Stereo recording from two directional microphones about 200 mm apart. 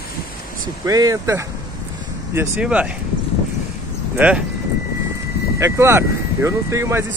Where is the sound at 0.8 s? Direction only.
15° right (ahead or behind).